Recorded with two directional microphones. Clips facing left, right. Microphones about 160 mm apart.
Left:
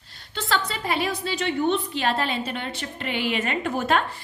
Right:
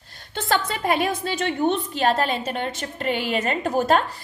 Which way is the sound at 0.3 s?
50° right (ahead or behind).